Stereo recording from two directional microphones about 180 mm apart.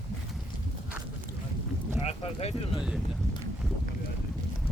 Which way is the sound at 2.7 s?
5° right (ahead or behind).